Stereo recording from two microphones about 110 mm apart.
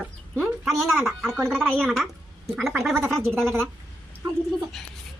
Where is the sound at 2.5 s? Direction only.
Centre (ahead or behind).